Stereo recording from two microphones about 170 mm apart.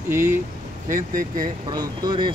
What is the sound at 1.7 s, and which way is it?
Speech, 25° right (ahead or behind).